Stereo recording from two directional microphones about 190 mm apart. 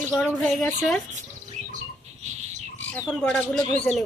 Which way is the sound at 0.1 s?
10° left (ahead or behind).